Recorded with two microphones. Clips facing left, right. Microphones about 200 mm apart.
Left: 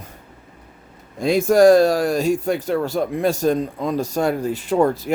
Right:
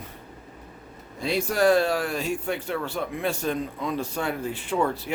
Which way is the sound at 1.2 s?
45° left (ahead or behind).